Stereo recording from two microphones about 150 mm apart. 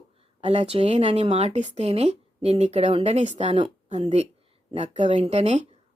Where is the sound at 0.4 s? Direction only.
40° right (ahead or behind).